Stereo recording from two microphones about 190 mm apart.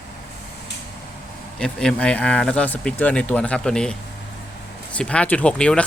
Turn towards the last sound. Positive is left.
turn(degrees=5)  # may be behind; listen again after turning